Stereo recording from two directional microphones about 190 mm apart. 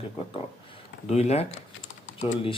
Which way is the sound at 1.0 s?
35° left (ahead or behind).